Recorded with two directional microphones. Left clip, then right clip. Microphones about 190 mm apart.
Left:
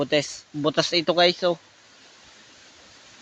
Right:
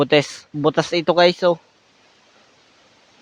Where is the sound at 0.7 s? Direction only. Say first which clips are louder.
Right 2 dB; 40° right (ahead or behind).